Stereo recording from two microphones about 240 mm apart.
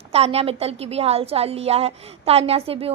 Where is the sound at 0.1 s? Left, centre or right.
Right.